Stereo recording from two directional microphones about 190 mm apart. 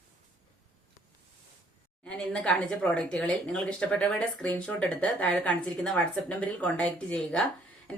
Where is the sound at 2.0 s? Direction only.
5° left (ahead or behind).